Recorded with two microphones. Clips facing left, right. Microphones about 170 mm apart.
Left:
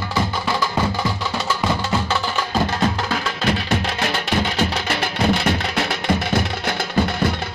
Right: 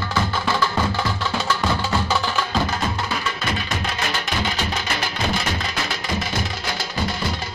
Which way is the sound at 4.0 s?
60° left (ahead or behind).